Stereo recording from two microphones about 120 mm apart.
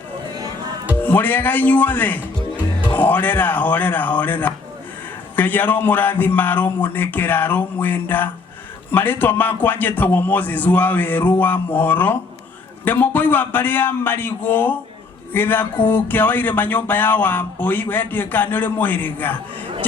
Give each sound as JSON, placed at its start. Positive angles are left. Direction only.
{"t": 1.0, "sound": "speech", "side_deg": 15}